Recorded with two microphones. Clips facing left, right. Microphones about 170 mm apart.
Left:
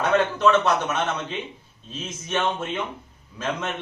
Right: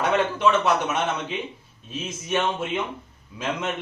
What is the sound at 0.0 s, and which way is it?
A man's voice, 10° right (ahead or behind).